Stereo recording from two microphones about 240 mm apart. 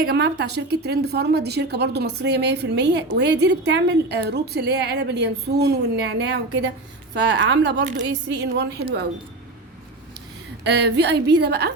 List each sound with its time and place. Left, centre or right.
0.1 s a woman's voice: right
10.7 s a woman's voice: right